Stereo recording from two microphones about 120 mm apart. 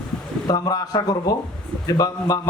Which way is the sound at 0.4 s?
35° left (ahead or behind).